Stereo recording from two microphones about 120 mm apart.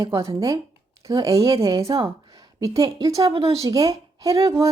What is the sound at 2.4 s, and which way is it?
A woman's voice, 30° right (ahead or behind).